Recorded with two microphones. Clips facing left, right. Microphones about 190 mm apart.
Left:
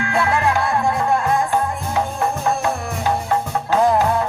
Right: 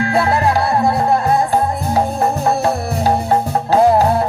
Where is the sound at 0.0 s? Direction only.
35° right (ahead or behind).